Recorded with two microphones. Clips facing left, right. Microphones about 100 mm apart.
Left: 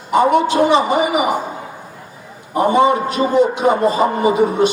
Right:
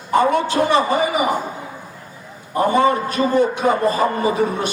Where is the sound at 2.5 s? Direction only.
15° left (ahead or behind).